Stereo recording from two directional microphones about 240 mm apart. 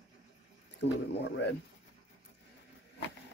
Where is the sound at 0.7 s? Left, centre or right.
Left.